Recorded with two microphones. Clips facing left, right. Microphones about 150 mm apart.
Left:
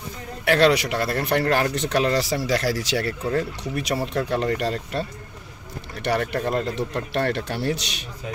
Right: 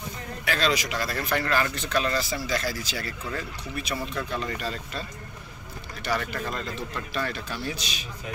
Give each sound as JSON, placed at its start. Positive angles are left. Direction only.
{"t": 0.5, "sound": "speech", "side_deg": 65}
{"t": 6.0, "sound": "speech", "side_deg": 65}